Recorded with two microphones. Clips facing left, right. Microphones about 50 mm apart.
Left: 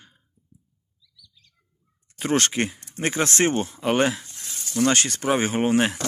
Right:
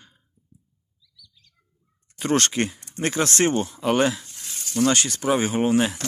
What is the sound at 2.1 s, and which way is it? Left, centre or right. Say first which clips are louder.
Speech: right 1 dB; left.